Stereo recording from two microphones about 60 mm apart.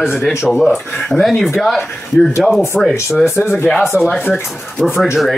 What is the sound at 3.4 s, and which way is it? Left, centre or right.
Speech, left.